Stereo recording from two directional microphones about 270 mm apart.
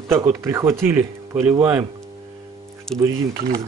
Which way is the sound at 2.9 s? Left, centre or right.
Centre.